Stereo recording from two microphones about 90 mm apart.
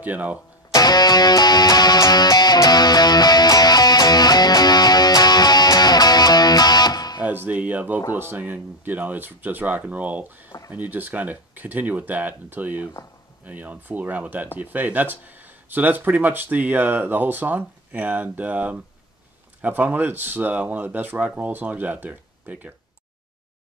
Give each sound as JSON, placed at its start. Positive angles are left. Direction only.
{"t": 0.0, "sound": "speech", "side_deg": -15}
{"t": 0.7, "sound": "music", "side_deg": 50}
{"t": 7.2, "sound": "speech", "side_deg": -15}